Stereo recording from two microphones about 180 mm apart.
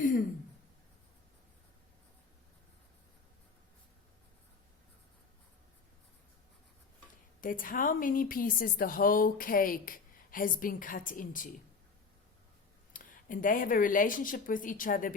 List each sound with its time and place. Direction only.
7.4 s a woman's voice: 50° left (ahead or behind)
12.9 s speech: 50° left (ahead or behind)